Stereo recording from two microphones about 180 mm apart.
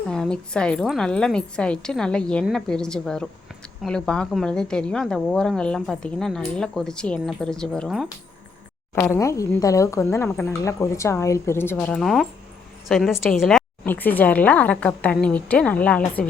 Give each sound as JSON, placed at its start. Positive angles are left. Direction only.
{"t": 0.1, "sound": "a woman's voice", "side_deg": 5}
{"t": 9.1, "sound": "a woman's voice", "side_deg": 15}